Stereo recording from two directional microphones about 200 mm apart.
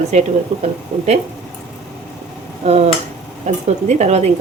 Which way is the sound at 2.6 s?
30° right (ahead or behind).